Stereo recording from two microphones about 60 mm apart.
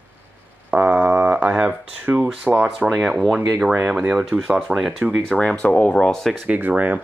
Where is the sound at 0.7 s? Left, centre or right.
Right.